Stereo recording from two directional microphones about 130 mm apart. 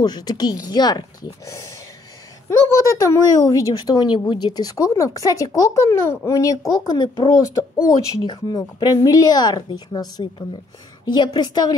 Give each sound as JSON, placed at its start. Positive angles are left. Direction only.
{"t": 0.0, "sound": "speech", "side_deg": 30}
{"t": 2.9, "sound": "speech", "side_deg": 25}